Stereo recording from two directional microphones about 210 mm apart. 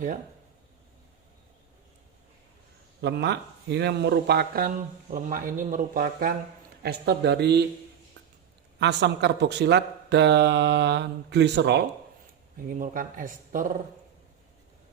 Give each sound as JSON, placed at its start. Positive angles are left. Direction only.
{"t": 3.0, "sound": "speech", "side_deg": -55}
{"t": 8.8, "sound": "speech", "side_deg": -55}
{"t": 12.6, "sound": "speech", "side_deg": -40}